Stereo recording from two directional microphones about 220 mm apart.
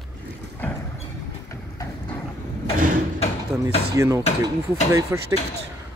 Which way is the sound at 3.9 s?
15° right (ahead or behind).